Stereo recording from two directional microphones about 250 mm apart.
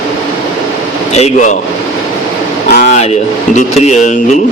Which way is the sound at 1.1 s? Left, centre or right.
Left.